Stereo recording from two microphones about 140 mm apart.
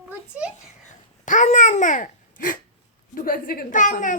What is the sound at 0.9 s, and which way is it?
Babbling, 60° left (ahead or behind).